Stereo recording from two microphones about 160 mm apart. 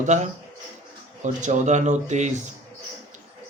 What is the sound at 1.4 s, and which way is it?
Speech, 50° right (ahead or behind).